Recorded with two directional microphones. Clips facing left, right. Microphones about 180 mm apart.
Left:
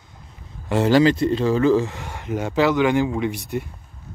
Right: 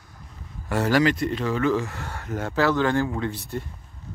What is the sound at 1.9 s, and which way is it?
Speech, 15° left (ahead or behind).